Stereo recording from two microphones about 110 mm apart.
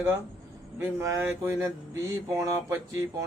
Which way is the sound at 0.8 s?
25° right (ahead or behind).